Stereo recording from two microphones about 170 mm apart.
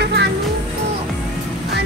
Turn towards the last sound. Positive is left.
turn(degrees=-80)